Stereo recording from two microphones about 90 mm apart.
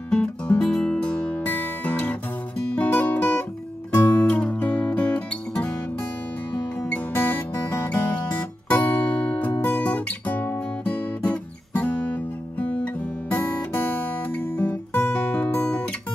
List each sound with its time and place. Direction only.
0.1 s music: 15° left (ahead or behind)
2.8 s guitar: 20° left (ahead or behind)
3.9 s music: 20° left (ahead or behind)
7.2 s music: 20° left (ahead or behind)